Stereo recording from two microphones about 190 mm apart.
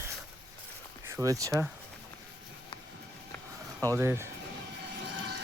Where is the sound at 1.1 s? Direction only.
15° right (ahead or behind).